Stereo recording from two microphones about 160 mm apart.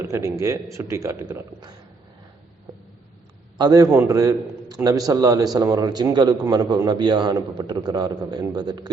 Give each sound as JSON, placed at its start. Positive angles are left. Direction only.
{"t": 0.1, "sound": "a man's voice", "side_deg": -15}
{"t": 3.6, "sound": "a man's voice", "side_deg": -25}